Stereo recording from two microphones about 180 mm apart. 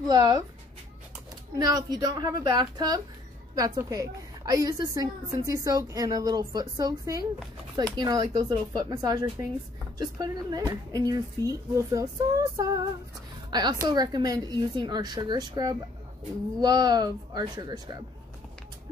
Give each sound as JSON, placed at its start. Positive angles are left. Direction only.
{"t": 0.1, "sound": "a woman's voice", "side_deg": -25}
{"t": 1.6, "sound": "a woman's voice", "side_deg": -20}